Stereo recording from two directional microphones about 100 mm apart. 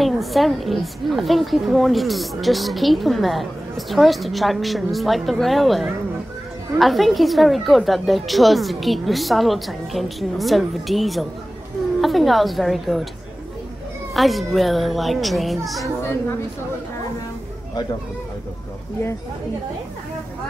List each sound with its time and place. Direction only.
0.0 s speech: centre (ahead or behind)
14.1 s speech: centre (ahead or behind)
16.0 s a woman's voice: 25° left (ahead or behind)